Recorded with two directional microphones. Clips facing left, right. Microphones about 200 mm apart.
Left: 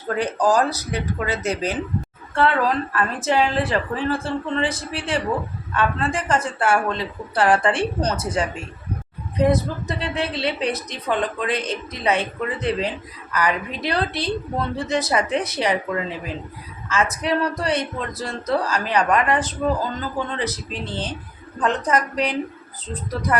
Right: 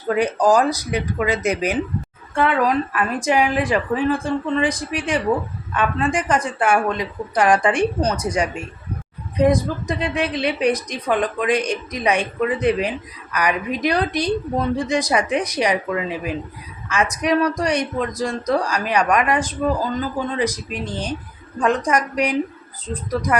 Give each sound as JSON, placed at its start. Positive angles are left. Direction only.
{"t": 0.1, "sound": "a woman's voice", "side_deg": -10}